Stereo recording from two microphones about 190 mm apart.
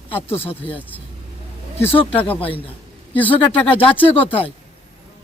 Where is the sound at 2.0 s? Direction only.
30° left (ahead or behind).